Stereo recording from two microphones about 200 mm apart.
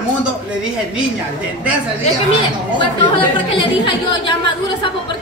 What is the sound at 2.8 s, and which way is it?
A woman's voice, 25° left (ahead or behind).